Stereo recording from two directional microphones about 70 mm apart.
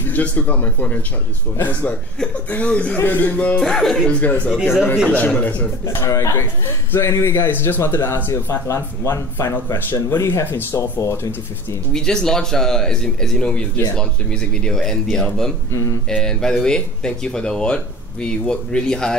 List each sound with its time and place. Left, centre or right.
0.0 s speech: left
3.0 s speech: left
3.3 s speech: centre
4.1 s speech: left
5.9 s a man's voice: left
11.9 s speech: centre
15.7 s speech: left
16.1 s speech: centre